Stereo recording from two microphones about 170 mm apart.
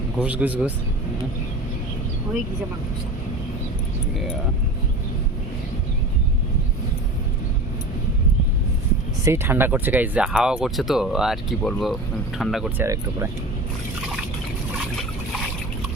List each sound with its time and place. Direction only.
0.2 s speech: 10° right (ahead or behind)
9.2 s speech: 15° right (ahead or behind)
12.8 s speech: 15° right (ahead or behind)